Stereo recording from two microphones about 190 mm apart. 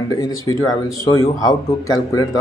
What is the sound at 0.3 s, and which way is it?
Speech, 20° left (ahead or behind).